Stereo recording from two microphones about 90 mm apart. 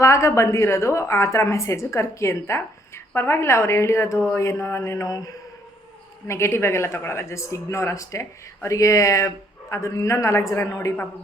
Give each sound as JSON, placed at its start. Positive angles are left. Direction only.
{"t": 0.0, "sound": "speech", "side_deg": 35}
{"t": 6.2, "sound": "speech", "side_deg": 30}